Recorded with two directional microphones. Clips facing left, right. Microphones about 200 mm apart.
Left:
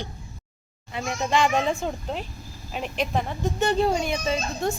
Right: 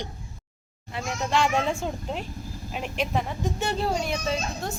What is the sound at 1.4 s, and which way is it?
Speech, 10° right (ahead or behind).